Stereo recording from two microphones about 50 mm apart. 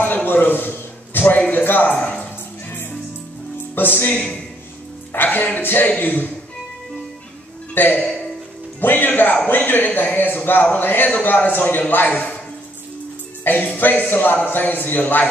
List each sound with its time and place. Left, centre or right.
0.0 s a sound: left
1.9 s speech: left
3.7 s a man's voice: left
5.1 s a man's voice: left
7.7 s a man's voice: left
13.4 s music: left
13.7 s a man's voice: left